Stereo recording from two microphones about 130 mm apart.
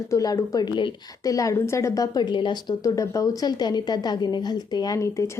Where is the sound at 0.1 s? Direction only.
25° left (ahead or behind).